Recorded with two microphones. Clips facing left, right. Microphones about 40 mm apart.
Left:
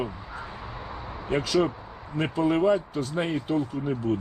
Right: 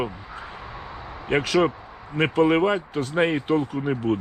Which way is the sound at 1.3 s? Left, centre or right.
Right.